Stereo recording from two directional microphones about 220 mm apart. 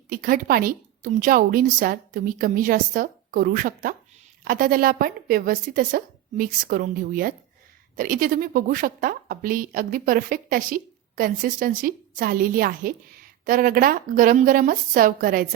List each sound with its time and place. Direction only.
0.1 s a woman's voice: 40° right (ahead or behind)